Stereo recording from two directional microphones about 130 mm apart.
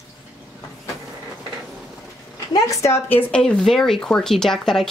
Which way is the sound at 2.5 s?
25° left (ahead or behind).